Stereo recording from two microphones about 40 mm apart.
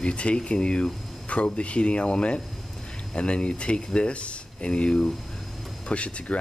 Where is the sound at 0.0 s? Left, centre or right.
Left.